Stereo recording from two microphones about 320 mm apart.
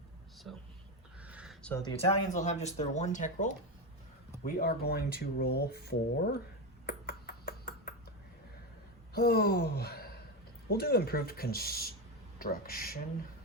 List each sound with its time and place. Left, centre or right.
0.5 s speech: centre; by 6.3 s left
6.8 s ping: left
9.1 s speech: left